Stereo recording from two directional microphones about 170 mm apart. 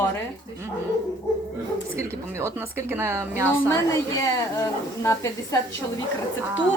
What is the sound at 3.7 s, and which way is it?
A woman's voice, 15° left (ahead or behind).